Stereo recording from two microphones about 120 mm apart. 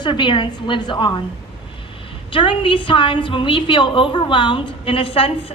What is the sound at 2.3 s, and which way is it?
A woman's voice, 45° left (ahead or behind).